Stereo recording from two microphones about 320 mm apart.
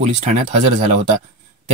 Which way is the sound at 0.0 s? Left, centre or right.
Right.